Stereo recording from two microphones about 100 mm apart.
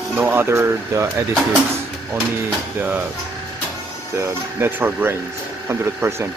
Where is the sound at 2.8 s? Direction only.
20° right (ahead or behind).